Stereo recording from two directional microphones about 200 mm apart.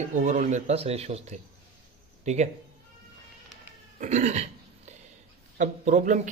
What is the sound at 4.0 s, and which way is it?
Speech, 35° right (ahead or behind).